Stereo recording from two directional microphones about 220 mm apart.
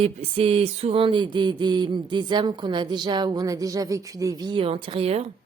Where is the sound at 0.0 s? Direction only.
25° right (ahead or behind).